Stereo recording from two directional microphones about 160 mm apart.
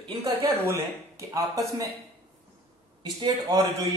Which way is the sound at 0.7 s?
20° right (ahead or behind).